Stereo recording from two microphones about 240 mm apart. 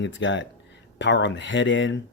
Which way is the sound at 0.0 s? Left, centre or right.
Left.